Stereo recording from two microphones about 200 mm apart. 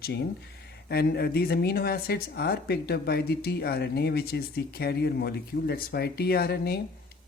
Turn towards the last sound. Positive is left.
turn(degrees=50)  # may be behind; listen again after turning